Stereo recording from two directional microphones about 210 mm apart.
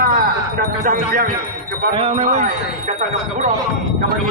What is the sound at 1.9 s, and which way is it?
Speech, 30° right (ahead or behind).